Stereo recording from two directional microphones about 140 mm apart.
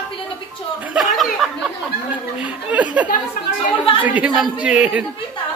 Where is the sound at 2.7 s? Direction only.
10° right (ahead or behind).